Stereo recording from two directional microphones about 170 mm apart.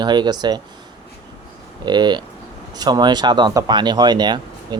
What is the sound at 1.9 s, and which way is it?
Speech, 25° right (ahead or behind).